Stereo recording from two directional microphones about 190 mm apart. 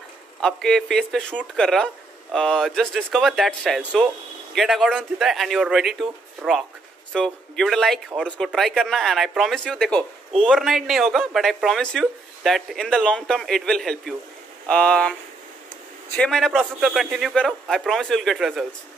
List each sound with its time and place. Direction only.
0.4 s speech: 5° left (ahead or behind)
16.2 s speech: centre (ahead or behind)